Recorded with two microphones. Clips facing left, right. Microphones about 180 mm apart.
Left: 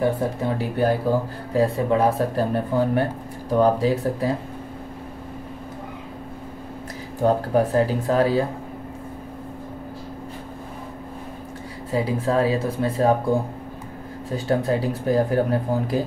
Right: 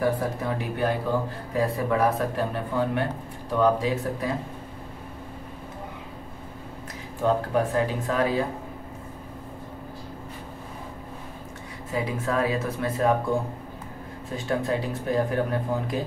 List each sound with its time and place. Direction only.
0.0 s speech: 25° left (ahead or behind)
7.2 s speech: 35° left (ahead or behind)
11.9 s speech: 30° left (ahead or behind)
14.3 s speech: 35° left (ahead or behind)